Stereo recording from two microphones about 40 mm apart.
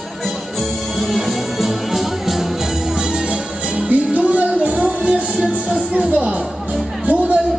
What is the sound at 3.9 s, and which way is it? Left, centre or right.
Music, right.